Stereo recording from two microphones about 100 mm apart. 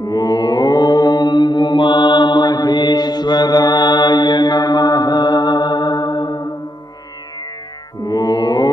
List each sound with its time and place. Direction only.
0.0 s mantra: 40° left (ahead or behind)
8.0 s mantra: 40° left (ahead or behind)